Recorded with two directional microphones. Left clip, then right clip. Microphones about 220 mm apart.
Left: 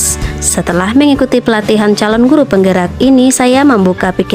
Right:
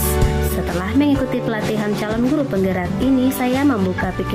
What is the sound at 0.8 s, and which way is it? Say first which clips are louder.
A woman's voice: left 9 dB; 45° left (ahead or behind).